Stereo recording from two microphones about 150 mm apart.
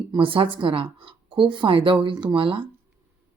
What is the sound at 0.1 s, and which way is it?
Speech, 35° right (ahead or behind).